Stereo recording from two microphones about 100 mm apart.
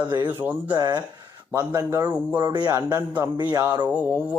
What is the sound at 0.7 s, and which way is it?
Speech, 45° right (ahead or behind).